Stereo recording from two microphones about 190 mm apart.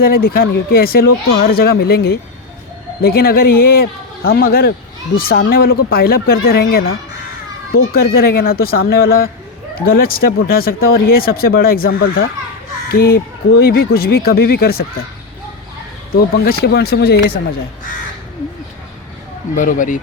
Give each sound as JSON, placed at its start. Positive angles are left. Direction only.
{"t": 0.0, "sound": "speech", "side_deg": 50}
{"t": 7.9, "sound": "speech", "side_deg": 50}
{"t": 16.1, "sound": "speech", "side_deg": 55}
{"t": 19.5, "sound": "speech", "side_deg": 45}